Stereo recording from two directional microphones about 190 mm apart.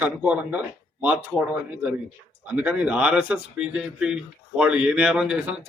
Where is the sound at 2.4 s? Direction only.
10° right (ahead or behind).